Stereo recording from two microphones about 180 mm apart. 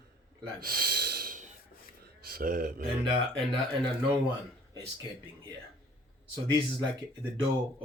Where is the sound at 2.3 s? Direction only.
55° right (ahead or behind).